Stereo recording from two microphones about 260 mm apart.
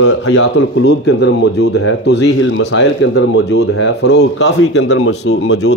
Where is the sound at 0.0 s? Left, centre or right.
Left.